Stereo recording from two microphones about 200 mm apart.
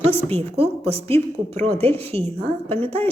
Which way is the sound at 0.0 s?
30° right (ahead or behind).